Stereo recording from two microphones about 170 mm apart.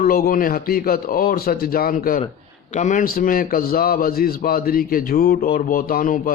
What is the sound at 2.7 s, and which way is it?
A man's voice, 45° left (ahead or behind).